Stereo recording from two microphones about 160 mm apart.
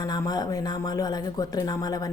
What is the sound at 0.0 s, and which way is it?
A woman's voice, 25° left (ahead or behind).